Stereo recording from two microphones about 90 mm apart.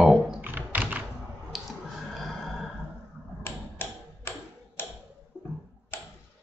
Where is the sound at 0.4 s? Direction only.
20° right (ahead or behind).